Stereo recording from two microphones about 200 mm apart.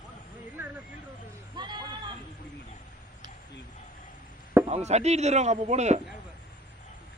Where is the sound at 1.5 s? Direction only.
20° right (ahead or behind).